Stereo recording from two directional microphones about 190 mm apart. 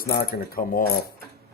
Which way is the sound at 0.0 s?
50° left (ahead or behind).